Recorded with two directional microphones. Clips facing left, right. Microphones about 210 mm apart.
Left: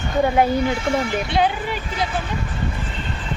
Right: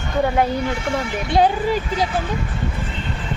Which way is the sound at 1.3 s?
40° right (ahead or behind).